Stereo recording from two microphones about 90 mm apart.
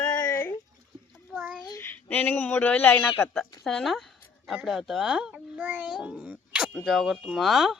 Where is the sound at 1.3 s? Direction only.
10° right (ahead or behind).